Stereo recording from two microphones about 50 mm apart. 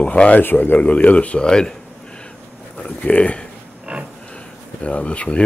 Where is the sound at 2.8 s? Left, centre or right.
Left.